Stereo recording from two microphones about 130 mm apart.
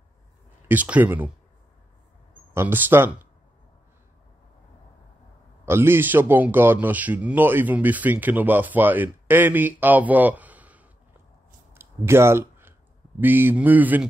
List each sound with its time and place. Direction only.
0.7 s a man's voice: 10° right (ahead or behind)
2.3 s speech: 15° right (ahead or behind)
5.7 s a man's voice: 20° right (ahead or behind)
11.7 s a sound: 20° right (ahead or behind)
13.2 s a man's voice: 15° right (ahead or behind)